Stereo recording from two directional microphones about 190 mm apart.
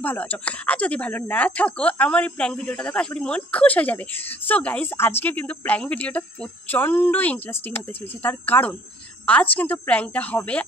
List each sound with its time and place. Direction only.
0.0 s a woman's voice: 10° left (ahead or behind)